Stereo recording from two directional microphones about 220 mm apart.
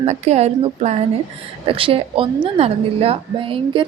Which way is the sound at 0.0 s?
30° right (ahead or behind).